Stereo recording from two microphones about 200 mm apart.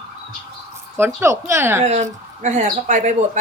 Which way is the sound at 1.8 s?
35° right (ahead or behind).